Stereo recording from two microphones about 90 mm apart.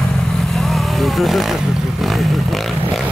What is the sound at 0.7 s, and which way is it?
Vehicle, centre (ahead or behind).